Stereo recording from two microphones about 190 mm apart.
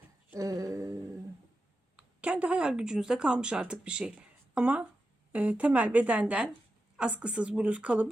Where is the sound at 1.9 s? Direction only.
5° right (ahead or behind).